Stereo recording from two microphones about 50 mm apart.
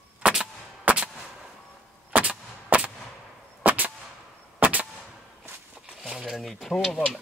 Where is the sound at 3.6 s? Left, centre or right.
Right.